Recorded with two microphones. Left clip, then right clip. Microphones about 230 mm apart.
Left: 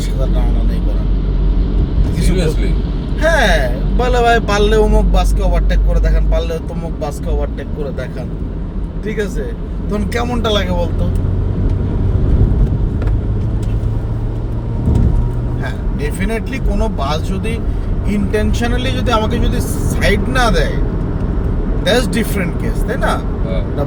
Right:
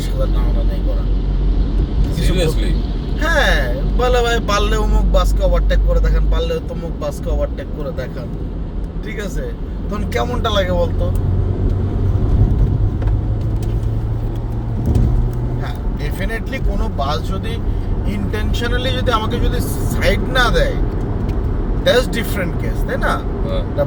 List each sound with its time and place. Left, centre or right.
3.2 s speech: centre
9.9 s speech: centre
16.5 s speech: left
18.3 s speech: centre
21.8 s speech: centre